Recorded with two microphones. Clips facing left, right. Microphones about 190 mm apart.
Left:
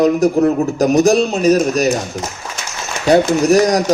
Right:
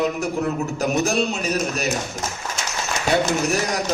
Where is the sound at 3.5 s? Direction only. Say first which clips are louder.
Left 11 dB; 40° left (ahead or behind).